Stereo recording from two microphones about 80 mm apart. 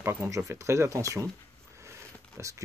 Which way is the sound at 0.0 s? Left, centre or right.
Right.